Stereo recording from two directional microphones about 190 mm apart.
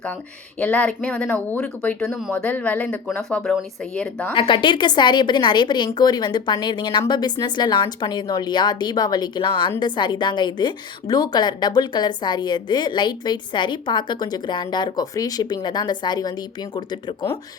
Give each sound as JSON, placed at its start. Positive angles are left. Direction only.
{"t": 0.6, "sound": "speech", "side_deg": 5}
{"t": 4.4, "sound": "a woman's voice", "side_deg": 25}